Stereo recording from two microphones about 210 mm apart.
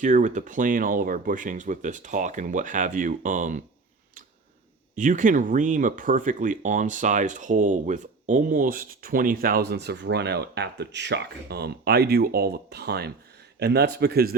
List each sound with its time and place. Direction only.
0.0 s speech: 35° right (ahead or behind)
4.9 s a man's voice: 40° right (ahead or behind)